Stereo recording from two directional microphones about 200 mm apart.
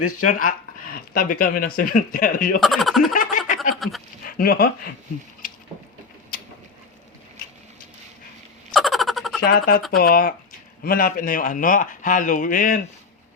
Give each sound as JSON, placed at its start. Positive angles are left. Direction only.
{"t": 0.3, "sound": "speech", "side_deg": 45}
{"t": 2.6, "sound": "speech", "side_deg": 0}
{"t": 3.2, "sound": "a sound", "side_deg": 40}
{"t": 4.2, "sound": "speech", "side_deg": 45}
{"t": 8.7, "sound": "a sound", "side_deg": 0}
{"t": 9.4, "sound": "speech", "side_deg": 50}